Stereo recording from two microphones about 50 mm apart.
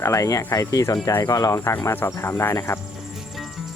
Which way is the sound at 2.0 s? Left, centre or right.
Left.